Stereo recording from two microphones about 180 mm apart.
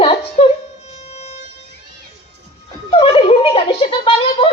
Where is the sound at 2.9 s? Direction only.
30° left (ahead or behind).